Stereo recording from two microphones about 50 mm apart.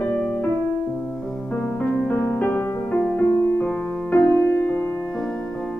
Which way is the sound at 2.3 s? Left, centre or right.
Left.